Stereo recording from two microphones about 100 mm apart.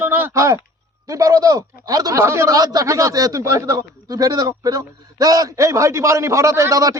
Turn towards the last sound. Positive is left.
turn(degrees=-30)  # may be behind; listen again after turning